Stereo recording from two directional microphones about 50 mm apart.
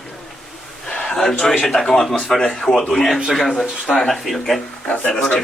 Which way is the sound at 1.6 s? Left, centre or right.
Centre.